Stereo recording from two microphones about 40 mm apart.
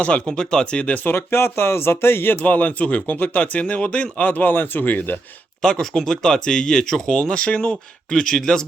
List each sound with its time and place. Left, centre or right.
0.0 s speech: left
0.3 s speech: centre
1.1 s speech: left
2.3 s speech: left
4.2 s speech: left
6.0 s speech: centre